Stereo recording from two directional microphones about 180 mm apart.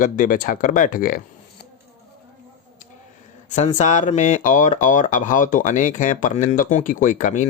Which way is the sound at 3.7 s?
40° left (ahead or behind).